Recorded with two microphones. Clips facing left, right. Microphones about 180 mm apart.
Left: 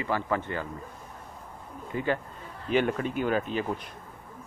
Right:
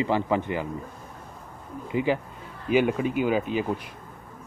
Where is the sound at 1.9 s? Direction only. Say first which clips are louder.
Right 4 dB; 10° right (ahead or behind).